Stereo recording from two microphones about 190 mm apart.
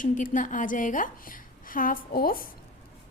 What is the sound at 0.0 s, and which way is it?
A woman's voice, 45° left (ahead or behind).